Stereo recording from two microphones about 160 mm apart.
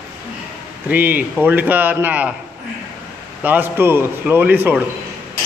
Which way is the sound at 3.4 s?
10° right (ahead or behind).